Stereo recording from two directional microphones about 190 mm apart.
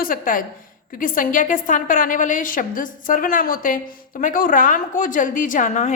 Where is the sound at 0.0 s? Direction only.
45° left (ahead or behind).